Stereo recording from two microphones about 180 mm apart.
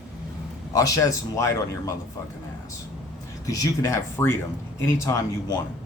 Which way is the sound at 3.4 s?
20° left (ahead or behind).